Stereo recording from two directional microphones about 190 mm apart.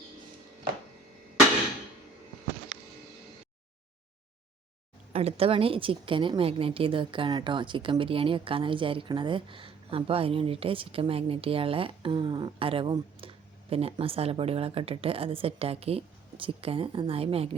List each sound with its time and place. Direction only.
5.1 s a woman's voice: 30° right (ahead or behind)